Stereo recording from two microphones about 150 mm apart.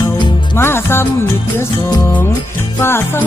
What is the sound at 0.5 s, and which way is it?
Music, 15° left (ahead or behind).